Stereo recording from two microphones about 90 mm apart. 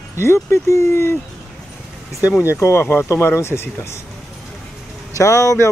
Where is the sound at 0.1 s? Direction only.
30° left (ahead or behind).